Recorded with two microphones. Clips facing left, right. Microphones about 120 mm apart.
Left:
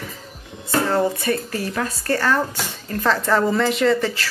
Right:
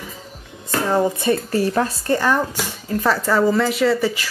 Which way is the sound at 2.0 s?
15° right (ahead or behind).